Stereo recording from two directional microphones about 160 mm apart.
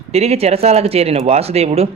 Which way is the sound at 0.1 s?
40° right (ahead or behind).